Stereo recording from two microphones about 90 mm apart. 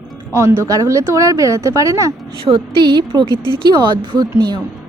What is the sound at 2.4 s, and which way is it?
A woman's voice, 65° right (ahead or behind).